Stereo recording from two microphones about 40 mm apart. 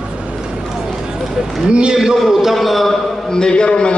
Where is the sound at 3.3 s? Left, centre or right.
Centre.